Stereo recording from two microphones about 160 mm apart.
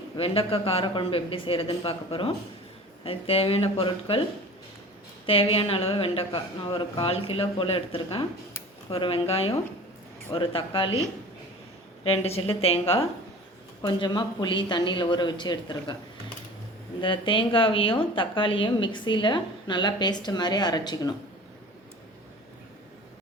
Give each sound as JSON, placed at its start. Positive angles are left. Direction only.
{"t": 0.2, "sound": "a woman's voice", "side_deg": 35}
{"t": 5.2, "sound": "a woman's voice", "side_deg": 35}
{"t": 12.0, "sound": "a woman's voice", "side_deg": 40}
{"t": 13.8, "sound": "a woman's voice", "side_deg": 25}
{"t": 17.0, "sound": "a woman's voice", "side_deg": 30}